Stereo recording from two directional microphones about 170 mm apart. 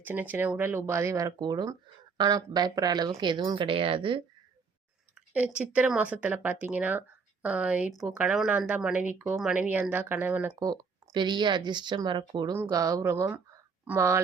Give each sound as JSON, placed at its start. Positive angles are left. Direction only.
{"t": 0.0, "sound": "a woman's voice", "side_deg": -10}
{"t": 5.1, "sound": "a woman's voice", "side_deg": -10}
{"t": 10.6, "sound": "a woman's voice", "side_deg": -25}